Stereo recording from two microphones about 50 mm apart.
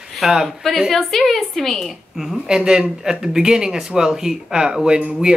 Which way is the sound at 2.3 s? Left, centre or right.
Centre.